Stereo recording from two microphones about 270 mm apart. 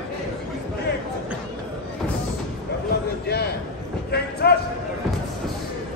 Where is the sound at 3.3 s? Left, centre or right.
Left.